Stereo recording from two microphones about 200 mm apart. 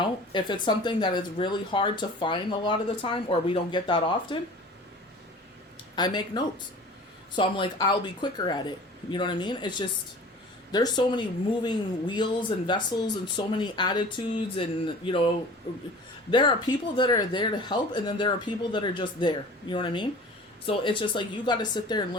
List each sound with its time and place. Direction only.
0.0 s speech: 25° left (ahead or behind)
6.0 s speech: 20° left (ahead or behind)
16.3 s speech: 25° left (ahead or behind)